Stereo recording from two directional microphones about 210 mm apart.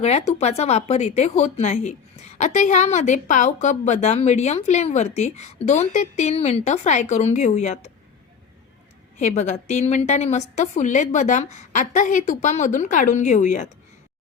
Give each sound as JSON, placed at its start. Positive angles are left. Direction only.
{"t": 0.0, "sound": "a woman's voice", "side_deg": 30}
{"t": 9.1, "sound": "a woman's voice", "side_deg": 35}